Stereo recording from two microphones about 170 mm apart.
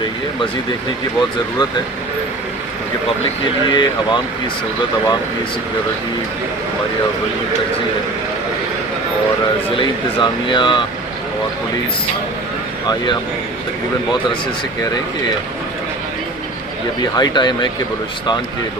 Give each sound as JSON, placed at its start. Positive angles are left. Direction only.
{"t": 3.7, "sound": "speech", "side_deg": 25}
{"t": 9.7, "sound": "speech", "side_deg": 30}
{"t": 17.0, "sound": "speech", "side_deg": 25}